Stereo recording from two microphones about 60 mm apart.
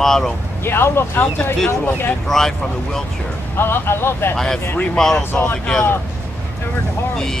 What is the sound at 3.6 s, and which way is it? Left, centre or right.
Speech, left.